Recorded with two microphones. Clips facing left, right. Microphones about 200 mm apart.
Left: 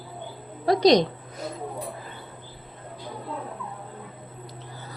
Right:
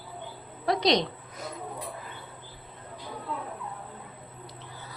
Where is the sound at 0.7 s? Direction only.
40° left (ahead or behind).